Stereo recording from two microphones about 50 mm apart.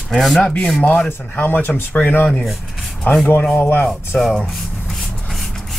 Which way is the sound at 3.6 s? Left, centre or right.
Left.